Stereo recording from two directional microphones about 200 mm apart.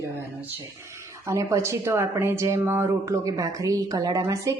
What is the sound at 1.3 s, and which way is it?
A woman's voice, 15° right (ahead or behind).